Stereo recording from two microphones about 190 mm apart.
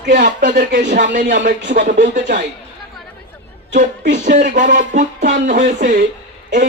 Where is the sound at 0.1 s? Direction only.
45° right (ahead or behind).